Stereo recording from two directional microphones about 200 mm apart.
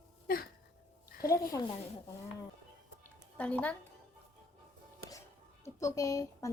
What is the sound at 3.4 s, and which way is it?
Speech, 5° left (ahead or behind).